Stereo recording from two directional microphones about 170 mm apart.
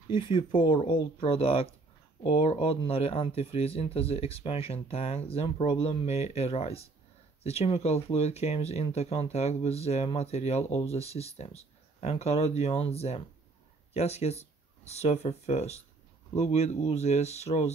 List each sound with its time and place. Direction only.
0.1 s speech: 30° left (ahead or behind)